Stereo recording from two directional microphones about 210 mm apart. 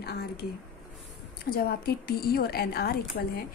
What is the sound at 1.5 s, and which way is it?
A woman's voice, 45° left (ahead or behind).